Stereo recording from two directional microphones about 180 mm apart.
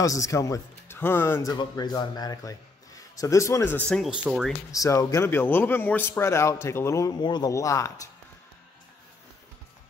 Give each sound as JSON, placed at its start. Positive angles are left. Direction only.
{"t": 0.0, "sound": "speech", "side_deg": 20}
{"t": 4.6, "sound": "speech", "side_deg": 20}